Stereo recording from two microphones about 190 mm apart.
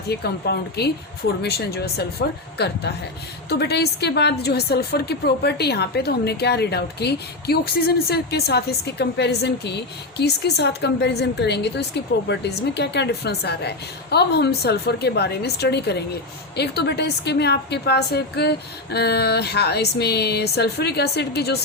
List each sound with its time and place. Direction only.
0.1 s a woman's voice: 60° left (ahead or behind)